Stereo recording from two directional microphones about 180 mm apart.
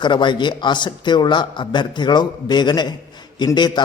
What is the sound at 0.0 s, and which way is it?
Speech, 25° left (ahead or behind).